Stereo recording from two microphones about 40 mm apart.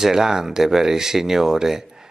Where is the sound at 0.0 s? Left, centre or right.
Centre.